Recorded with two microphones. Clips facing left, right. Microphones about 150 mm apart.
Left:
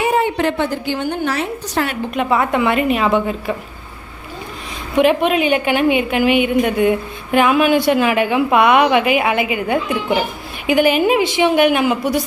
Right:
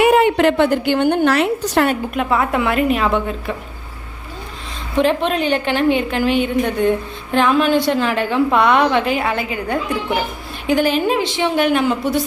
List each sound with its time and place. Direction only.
0.0 s a woman's voice: 75° right (ahead or behind)
2.1 s a woman's voice: centre (ahead or behind)
4.9 s a woman's voice: 10° left (ahead or behind)